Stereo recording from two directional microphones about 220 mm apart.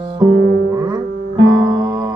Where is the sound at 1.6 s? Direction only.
15° right (ahead or behind).